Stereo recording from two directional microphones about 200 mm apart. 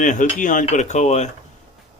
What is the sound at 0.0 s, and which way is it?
Speech, 40° left (ahead or behind).